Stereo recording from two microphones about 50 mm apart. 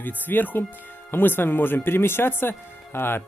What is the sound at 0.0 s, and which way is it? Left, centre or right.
A man's voice, left.